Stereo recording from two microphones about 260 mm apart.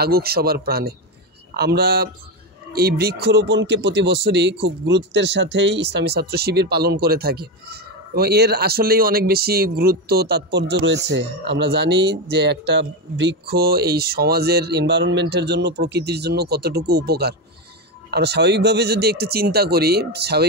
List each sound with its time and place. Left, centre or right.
0.0 s speech: right